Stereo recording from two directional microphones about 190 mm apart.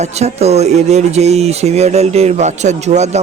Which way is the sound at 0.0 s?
35° right (ahead or behind).